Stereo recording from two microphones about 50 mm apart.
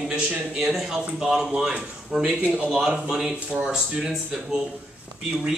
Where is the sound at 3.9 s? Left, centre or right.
Centre.